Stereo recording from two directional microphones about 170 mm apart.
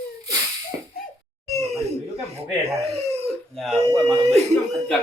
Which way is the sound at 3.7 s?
35° right (ahead or behind).